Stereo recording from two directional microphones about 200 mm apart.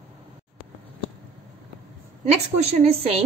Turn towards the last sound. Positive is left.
turn(degrees=-30)  # may be behind; listen again after turning